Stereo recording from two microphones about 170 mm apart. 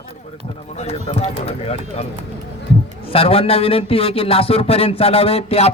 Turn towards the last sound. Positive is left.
turn(degrees=40)  # may be behind; listen again after turning